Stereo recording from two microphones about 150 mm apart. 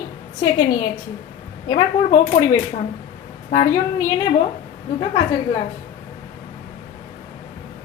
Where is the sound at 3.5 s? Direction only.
45° left (ahead or behind).